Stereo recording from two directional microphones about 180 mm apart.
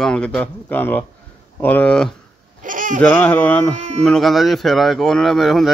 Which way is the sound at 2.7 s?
45° right (ahead or behind).